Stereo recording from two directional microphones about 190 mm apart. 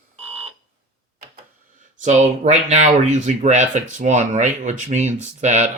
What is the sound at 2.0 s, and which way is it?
Speech, 40° right (ahead or behind).